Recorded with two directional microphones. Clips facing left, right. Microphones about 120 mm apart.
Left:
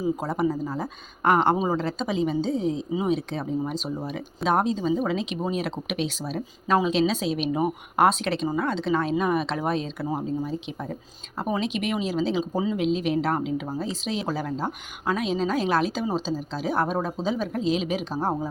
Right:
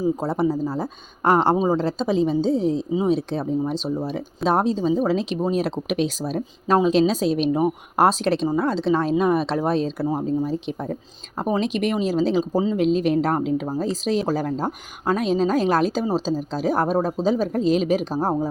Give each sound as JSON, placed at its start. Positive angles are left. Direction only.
{"t": 0.0, "sound": "speech", "side_deg": -30}
{"t": 4.4, "sound": "speech", "side_deg": -35}